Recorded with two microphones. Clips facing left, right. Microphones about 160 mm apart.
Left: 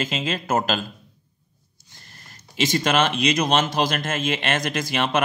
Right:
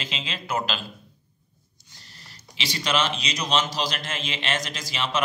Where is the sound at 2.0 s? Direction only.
50° left (ahead or behind).